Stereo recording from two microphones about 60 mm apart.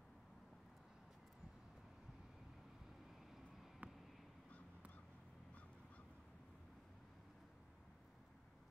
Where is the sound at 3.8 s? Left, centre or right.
Right.